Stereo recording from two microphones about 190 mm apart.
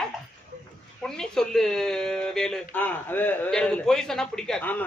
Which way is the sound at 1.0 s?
5° left (ahead or behind).